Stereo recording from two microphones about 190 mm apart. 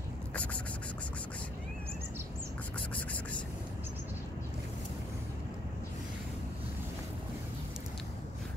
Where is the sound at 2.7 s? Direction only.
10° left (ahead or behind).